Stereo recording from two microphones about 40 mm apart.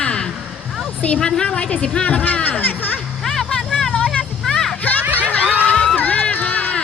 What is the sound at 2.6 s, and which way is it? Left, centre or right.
Music, left.